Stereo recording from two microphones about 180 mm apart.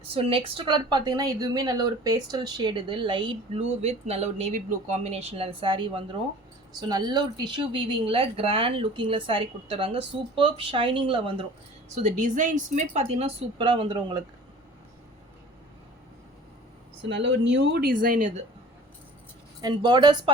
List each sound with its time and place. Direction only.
0.0 s a woman's voice: 30° right (ahead or behind)
11.9 s a woman's voice: 40° right (ahead or behind); by 14.3 s 25° right (ahead or behind)
17.0 s speech: 80° right; by 18.4 s 40° right (ahead or behind)
19.6 s a woman's voice: 25° right (ahead or behind)